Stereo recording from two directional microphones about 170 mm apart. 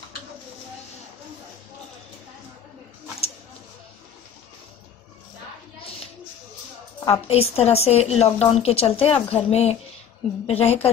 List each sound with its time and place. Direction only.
7.1 s a woman's voice: 35° left (ahead or behind)